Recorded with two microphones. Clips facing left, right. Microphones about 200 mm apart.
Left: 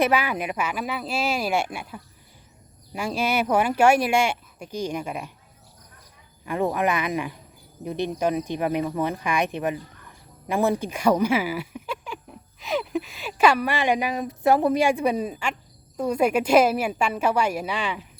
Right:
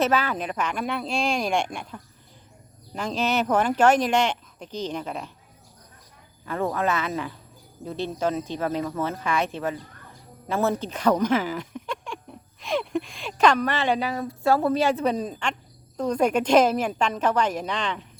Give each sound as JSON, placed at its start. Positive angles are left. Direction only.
{"t": 0.0, "sound": "speech", "side_deg": 10}
{"t": 6.4, "sound": "speech", "side_deg": 15}